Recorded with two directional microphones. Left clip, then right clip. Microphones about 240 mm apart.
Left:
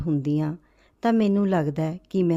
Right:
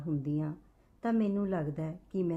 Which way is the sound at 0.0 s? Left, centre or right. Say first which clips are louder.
Left 10 dB; left.